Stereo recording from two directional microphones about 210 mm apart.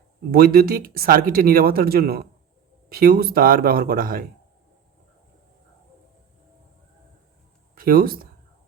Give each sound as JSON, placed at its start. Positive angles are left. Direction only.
{"t": 0.3, "sound": "speech", "side_deg": -45}
{"t": 7.8, "sound": "speech", "side_deg": -45}